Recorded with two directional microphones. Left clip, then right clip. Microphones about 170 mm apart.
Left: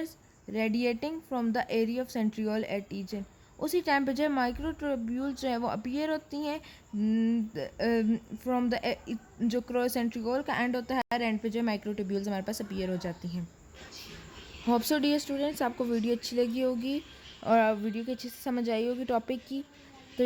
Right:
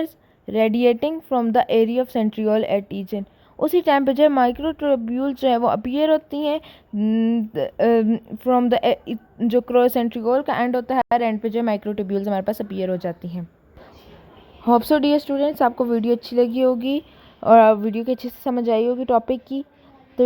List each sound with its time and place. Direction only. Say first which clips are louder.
0.5 s a woman's voice: right 13 dB; 40° right (ahead or behind)
14.6 s speech: right 11 dB; 25° right (ahead or behind)
20.2 s a sound: right 11 dB; 20° right (ahead or behind)